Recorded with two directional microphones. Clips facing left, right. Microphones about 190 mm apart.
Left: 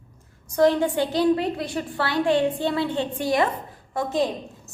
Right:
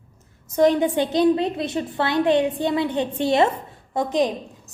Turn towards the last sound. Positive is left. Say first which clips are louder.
# right 3 dB
turn(degrees=-20)  # may be behind; listen again after turning